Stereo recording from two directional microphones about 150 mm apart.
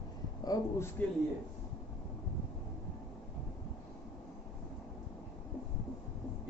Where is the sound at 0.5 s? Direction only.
25° left (ahead or behind).